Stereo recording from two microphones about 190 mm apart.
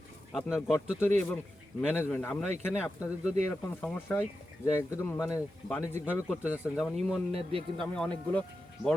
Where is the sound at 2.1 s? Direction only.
10° left (ahead or behind).